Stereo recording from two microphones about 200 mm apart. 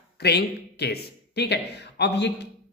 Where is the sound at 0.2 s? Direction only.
55° left (ahead or behind).